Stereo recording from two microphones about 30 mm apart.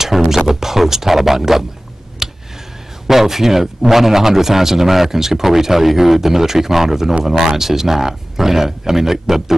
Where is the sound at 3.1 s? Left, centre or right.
Centre.